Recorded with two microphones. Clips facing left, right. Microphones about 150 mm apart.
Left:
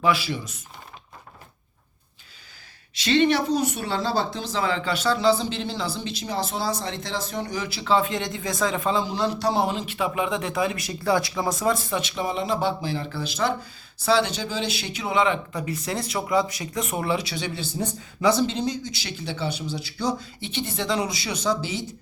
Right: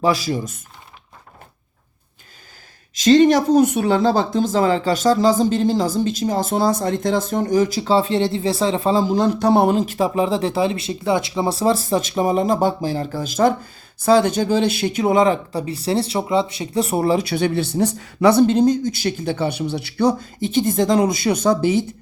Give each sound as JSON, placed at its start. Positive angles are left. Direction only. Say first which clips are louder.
{"t": 0.0, "sound": "speech", "louder": "right 4 dB", "side_deg": -40}
{"t": 2.9, "sound": "speech", "louder": "right 8 dB", "side_deg": -40}
{"t": 17.2, "sound": "speech", "louder": "right 11 dB", "side_deg": -55}